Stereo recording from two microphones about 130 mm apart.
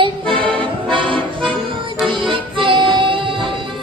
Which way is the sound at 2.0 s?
40° right (ahead or behind).